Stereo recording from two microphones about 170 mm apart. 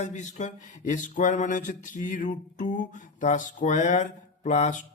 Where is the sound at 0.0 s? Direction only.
45° left (ahead or behind).